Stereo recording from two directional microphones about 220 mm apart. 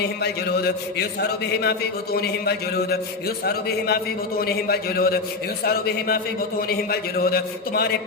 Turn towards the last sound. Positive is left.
turn(degrees=45)  # may be behind; listen again after turning